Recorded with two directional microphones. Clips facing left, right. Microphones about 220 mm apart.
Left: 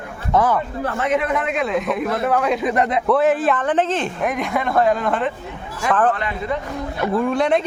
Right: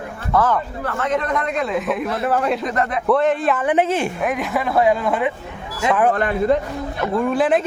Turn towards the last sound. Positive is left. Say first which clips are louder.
# right 1 dB
turn(degrees=-5)  # may be behind; listen again after turning